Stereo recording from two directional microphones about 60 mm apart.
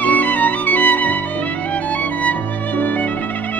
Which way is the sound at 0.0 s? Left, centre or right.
Left.